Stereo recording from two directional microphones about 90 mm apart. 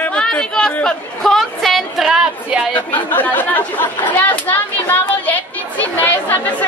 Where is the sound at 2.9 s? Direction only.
20° left (ahead or behind).